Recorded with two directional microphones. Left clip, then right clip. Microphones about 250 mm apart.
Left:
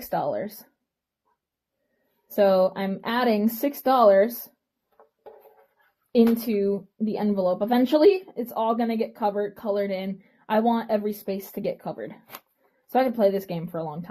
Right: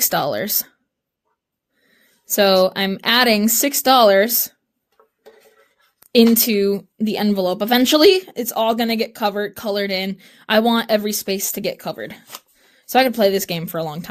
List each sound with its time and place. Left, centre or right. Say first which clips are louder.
0.1 s speech: right 6 dB; right
2.3 s speech: right 5 dB; right
6.1 s speech: right 7 dB; right